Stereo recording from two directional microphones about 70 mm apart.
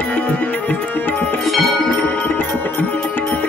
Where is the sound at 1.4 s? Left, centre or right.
Centre.